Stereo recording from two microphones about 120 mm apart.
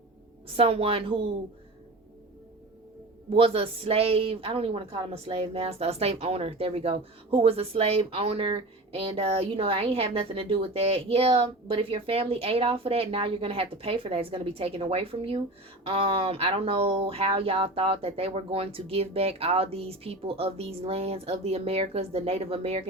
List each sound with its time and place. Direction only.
0.4 s a woman's voice: 50° right (ahead or behind)
3.3 s a woman's voice: 50° right (ahead or behind)